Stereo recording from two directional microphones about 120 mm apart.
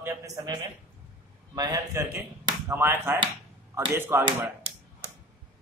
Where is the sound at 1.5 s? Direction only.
25° right (ahead or behind).